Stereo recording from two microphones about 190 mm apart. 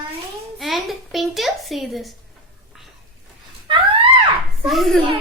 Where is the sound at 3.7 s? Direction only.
25° right (ahead or behind).